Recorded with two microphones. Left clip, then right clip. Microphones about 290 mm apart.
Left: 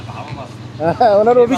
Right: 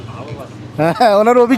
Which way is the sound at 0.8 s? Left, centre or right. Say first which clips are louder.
Right 1 dB; right.